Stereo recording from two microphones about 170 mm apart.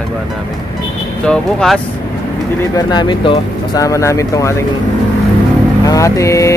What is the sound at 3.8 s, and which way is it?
Speech, 20° left (ahead or behind).